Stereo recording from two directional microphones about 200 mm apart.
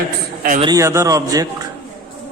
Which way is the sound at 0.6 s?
15° right (ahead or behind).